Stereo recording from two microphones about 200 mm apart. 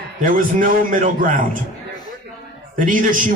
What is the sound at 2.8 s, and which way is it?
Speech, 40° right (ahead or behind).